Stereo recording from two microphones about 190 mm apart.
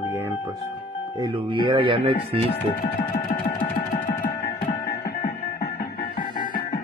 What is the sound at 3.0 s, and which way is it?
Music, 50° left (ahead or behind).